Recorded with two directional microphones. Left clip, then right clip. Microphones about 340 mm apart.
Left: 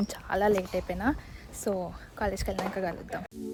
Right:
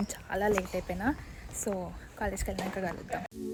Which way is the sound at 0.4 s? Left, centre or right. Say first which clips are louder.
Left 4 dB; centre.